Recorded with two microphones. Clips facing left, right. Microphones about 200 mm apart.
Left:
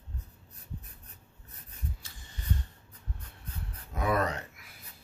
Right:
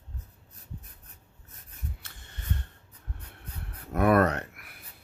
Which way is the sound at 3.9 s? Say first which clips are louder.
Right 7 dB; 60° right (ahead or behind).